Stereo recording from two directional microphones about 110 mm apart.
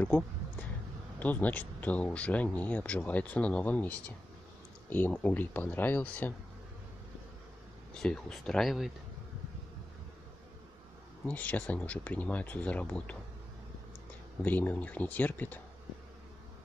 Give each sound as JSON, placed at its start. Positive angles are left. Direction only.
{"t": 1.2, "sound": "speech", "side_deg": 15}
{"t": 7.9, "sound": "speech", "side_deg": 5}
{"t": 11.2, "sound": "speech", "side_deg": 15}
{"t": 14.4, "sound": "speech", "side_deg": 15}